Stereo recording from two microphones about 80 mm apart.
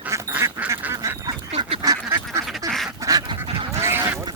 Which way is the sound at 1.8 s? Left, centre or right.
Right.